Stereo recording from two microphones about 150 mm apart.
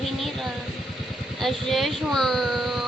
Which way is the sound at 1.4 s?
Centre (ahead or behind).